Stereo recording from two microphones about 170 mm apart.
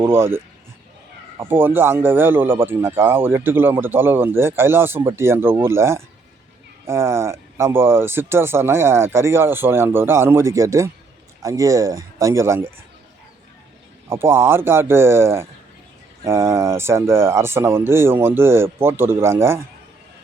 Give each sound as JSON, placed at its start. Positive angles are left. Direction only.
{"t": 0.0, "sound": "speech", "side_deg": -15}
{"t": 14.1, "sound": "speech", "side_deg": -15}